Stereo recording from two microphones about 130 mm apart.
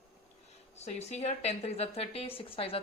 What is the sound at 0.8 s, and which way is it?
A woman's voice, 55° left (ahead or behind).